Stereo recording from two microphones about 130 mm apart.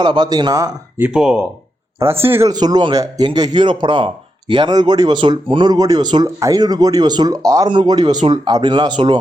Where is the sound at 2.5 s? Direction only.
30° right (ahead or behind).